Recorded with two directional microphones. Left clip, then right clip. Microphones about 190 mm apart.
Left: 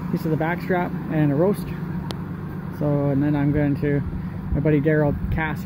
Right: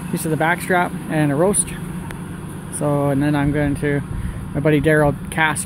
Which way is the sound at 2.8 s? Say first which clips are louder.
Right 4 dB; 25° right (ahead or behind).